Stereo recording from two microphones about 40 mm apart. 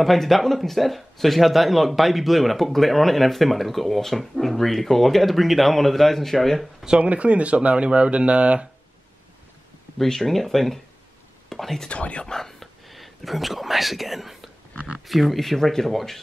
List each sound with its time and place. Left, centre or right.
0.0 s speech: centre
7.0 s speech: right
9.9 s speech: centre
11.9 s speech: left
12.3 s speech: centre